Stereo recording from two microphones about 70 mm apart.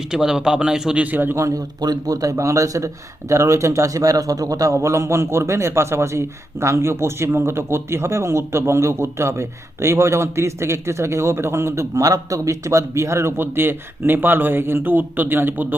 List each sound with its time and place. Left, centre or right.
0.1 s a man's voice: centre
1.0 s a man's voice: right
1.4 s a man's voice: right